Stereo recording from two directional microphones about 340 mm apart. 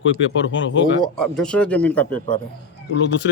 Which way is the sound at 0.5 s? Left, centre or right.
Left.